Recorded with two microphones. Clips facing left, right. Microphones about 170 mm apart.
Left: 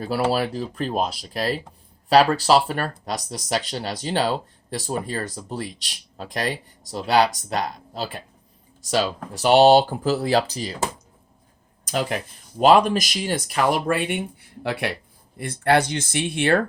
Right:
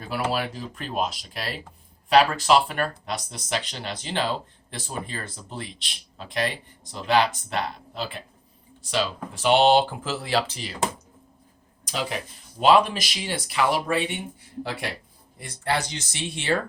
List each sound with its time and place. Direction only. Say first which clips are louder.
0.0 s speech: left 5 dB; 35° left (ahead or behind)
11.9 s speech: left 5 dB; 50° left (ahead or behind)